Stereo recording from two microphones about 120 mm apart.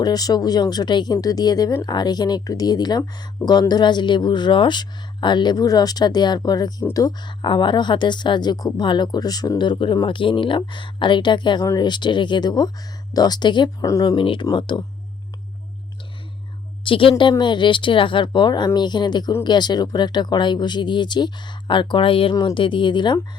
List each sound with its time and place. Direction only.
0.0 s a woman's voice: 30° left (ahead or behind)
13.8 s speech: 30° left (ahead or behind)
14.2 s a woman's voice: 45° left (ahead or behind)
16.8 s a woman's voice: 45° left (ahead or behind)